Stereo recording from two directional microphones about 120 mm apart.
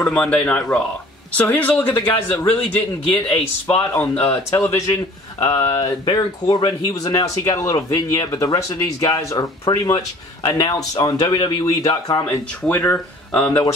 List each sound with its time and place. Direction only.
0.1 s speech: 10° left (ahead or behind); by 4.9 s 25° left (ahead or behind)
5.7 s speech: 35° left (ahead or behind)
12.3 s speech: 15° left (ahead or behind)